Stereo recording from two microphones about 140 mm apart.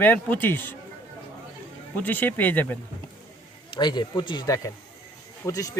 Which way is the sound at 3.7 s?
30° left (ahead or behind).